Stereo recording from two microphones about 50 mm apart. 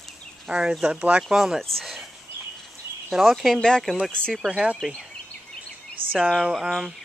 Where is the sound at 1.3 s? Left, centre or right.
Centre.